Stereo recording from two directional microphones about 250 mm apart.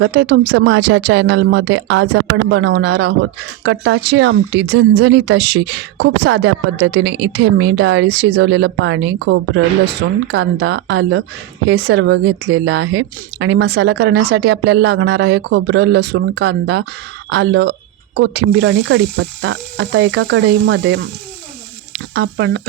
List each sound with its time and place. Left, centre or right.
0.0 s speech: right
22.1 s speech: right